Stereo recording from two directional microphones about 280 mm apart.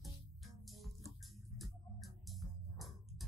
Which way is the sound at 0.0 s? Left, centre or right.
Centre.